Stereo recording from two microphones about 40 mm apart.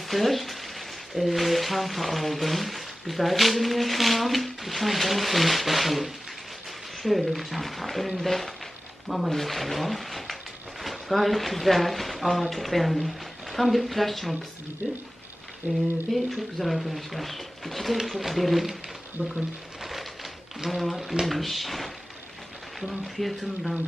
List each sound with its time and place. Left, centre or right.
0.1 s speech: centre
15.6 s a sound: right
16.0 s speech: centre
19.2 s speech: left
19.8 s a sound: centre
20.7 s speech: centre